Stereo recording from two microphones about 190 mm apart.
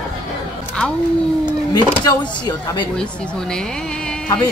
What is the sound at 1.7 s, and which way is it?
Speech, 20° left (ahead or behind).